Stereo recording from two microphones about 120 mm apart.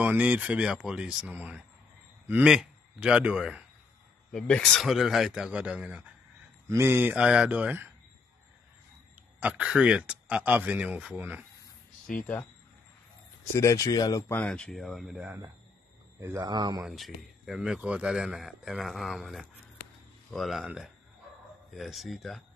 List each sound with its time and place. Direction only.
0.0 s a man's voice: 15° right (ahead or behind)
9.4 s speech: 10° right (ahead or behind)
12.1 s speech: 10° left (ahead or behind)
13.6 s speech: 25° left (ahead or behind)
14.3 s speech: 10° left (ahead or behind)
16.3 s speech: 35° right (ahead or behind)
16.8 s speech: centre (ahead or behind)